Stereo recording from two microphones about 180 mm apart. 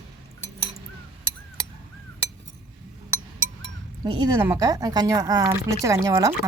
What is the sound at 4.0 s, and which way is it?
Speech, 25° right (ahead or behind).